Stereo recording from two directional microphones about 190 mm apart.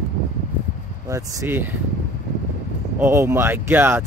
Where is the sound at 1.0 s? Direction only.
15° right (ahead or behind).